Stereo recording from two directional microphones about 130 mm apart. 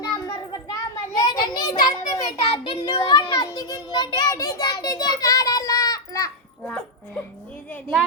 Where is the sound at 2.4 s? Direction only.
45° left (ahead or behind).